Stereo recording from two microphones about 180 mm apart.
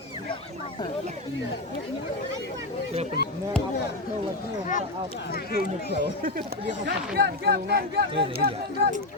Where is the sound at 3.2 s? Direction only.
60° left (ahead or behind).